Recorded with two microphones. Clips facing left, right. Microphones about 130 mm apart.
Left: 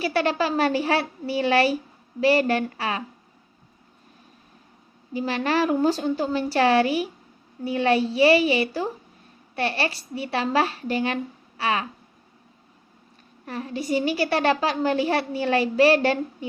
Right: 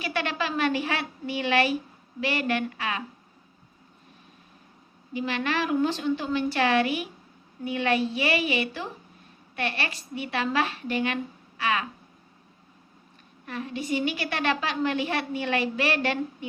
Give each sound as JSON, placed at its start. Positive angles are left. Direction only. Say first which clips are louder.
{"t": 0.0, "sound": "a woman's voice", "louder": "left 6 dB", "side_deg": 35}
{"t": 5.1, "sound": "a woman's voice", "louder": "left 4 dB", "side_deg": 35}
{"t": 13.4, "sound": "a woman's voice", "louder": "left 3 dB", "side_deg": 35}